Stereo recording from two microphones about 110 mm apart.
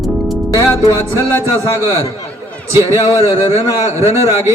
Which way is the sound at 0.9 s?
30° right (ahead or behind).